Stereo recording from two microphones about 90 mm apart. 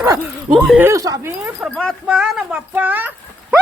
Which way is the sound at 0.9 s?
40° right (ahead or behind).